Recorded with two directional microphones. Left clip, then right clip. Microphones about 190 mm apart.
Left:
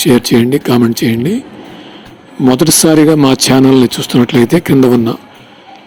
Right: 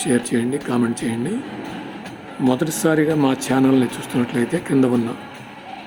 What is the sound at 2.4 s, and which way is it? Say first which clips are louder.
Speech: left 10 dB; 40° left (ahead or behind).